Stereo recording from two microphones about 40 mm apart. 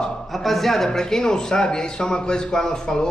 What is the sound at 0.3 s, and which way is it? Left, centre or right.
A man's voice, centre.